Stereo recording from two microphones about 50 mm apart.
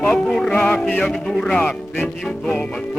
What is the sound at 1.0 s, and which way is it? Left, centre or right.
Speech, centre.